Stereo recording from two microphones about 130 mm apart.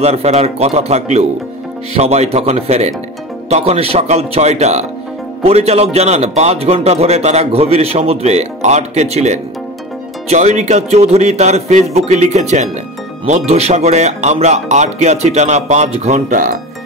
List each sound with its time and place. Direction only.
0.0 s a man's voice: 55° right (ahead or behind); by 16.5 s 85° right